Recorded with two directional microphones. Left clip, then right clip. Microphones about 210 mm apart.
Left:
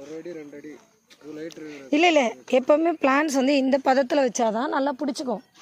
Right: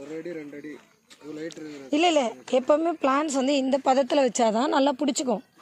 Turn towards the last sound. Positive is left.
turn(degrees=-10)  # may be behind; listen again after turning